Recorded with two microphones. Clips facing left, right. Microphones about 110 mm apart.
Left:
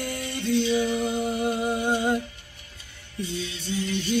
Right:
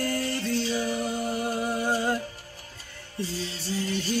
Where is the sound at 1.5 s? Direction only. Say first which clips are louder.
Left 2 dB; 20° left (ahead or behind).